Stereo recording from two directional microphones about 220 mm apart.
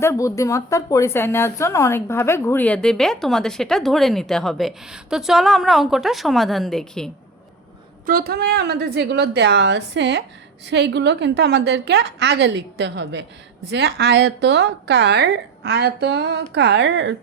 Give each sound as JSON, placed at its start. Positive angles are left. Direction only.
{"t": 0.0, "sound": "a woman's voice", "side_deg": 15}
{"t": 8.0, "sound": "a woman's voice", "side_deg": -40}